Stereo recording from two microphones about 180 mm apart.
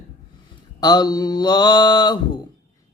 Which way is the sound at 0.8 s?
25° left (ahead or behind).